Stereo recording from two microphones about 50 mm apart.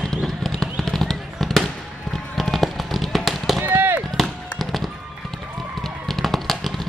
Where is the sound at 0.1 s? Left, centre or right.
Centre.